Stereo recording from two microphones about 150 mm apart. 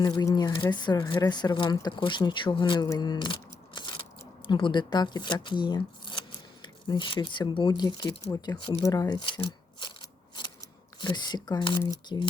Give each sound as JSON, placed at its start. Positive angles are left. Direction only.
{"t": 0.0, "sound": "speech", "side_deg": 30}